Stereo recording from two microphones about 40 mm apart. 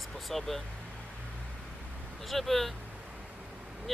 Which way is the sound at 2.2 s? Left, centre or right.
Centre.